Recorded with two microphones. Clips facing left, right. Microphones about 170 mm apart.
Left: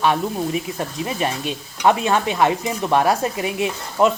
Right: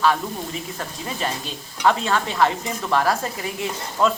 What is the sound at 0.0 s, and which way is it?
Speech, 20° left (ahead or behind).